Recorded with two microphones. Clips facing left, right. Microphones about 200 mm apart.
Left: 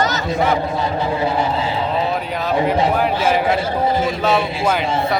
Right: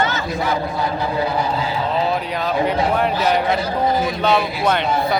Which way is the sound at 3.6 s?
25° left (ahead or behind).